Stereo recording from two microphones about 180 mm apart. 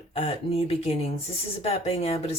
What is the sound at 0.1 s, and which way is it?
Speech, 35° left (ahead or behind).